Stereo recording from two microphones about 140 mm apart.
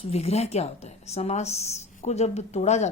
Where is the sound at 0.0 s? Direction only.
45° left (ahead or behind).